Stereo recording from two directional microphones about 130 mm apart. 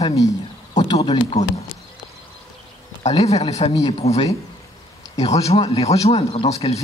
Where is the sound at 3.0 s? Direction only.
55° left (ahead or behind).